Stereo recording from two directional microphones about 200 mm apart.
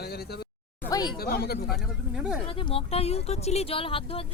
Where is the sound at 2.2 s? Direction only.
5° right (ahead or behind).